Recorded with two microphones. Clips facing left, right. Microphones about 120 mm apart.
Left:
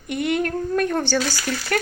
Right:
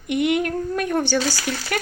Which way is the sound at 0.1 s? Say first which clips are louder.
Right 2 dB; 20° right (ahead or behind).